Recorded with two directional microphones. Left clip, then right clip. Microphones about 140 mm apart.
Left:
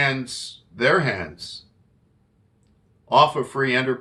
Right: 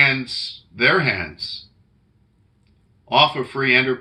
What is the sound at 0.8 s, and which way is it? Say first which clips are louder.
Speech: right 2 dB; 30° left (ahead or behind).